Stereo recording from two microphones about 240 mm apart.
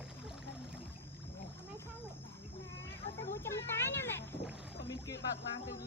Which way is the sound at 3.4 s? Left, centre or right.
Centre.